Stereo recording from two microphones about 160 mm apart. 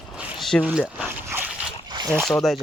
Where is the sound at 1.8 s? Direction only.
25° right (ahead or behind).